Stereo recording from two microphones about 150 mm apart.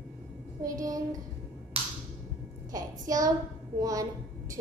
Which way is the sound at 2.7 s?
25° right (ahead or behind).